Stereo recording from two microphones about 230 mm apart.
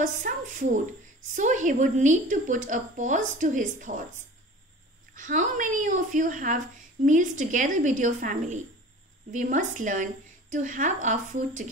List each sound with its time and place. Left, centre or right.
0.0 s a woman's voice: right
5.1 s a woman's voice: right